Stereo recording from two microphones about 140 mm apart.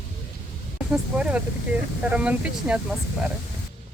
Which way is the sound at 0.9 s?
10° right (ahead or behind).